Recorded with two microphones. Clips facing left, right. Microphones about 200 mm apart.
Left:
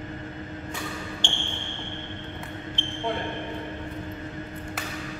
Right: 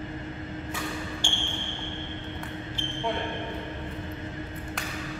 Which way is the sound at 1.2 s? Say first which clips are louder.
Even; 10° right (ahead or behind).